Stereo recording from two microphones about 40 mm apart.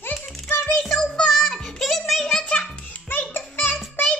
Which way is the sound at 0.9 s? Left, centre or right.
Centre.